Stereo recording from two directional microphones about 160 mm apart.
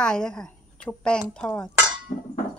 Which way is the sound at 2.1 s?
50° left (ahead or behind).